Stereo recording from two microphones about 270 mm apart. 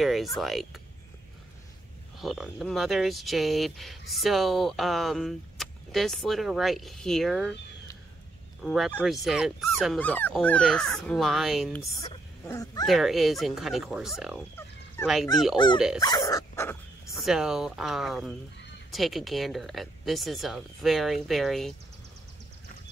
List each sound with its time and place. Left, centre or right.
0.0 s speech: centre
2.1 s speech: centre
8.6 s speech: centre
12.0 s speech: centre
12.8 s speech: centre
15.0 s speech: centre